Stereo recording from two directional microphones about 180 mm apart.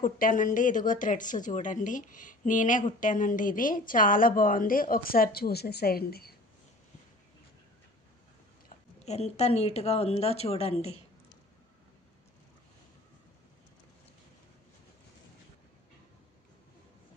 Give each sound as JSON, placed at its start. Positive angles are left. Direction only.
{"t": 0.0, "sound": "a woman's voice", "side_deg": 50}
{"t": 8.6, "sound": "speech", "side_deg": 35}